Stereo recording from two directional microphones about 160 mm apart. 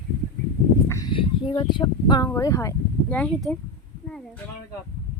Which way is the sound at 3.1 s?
5° left (ahead or behind).